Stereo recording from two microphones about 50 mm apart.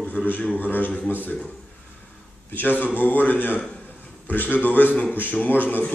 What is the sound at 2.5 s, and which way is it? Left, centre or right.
Speech, left.